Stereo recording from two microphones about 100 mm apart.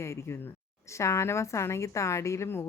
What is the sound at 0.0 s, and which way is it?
A woman's voice, 30° left (ahead or behind).